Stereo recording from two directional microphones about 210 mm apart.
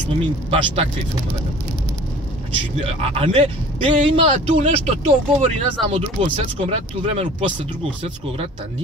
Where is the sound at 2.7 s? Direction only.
25° right (ahead or behind).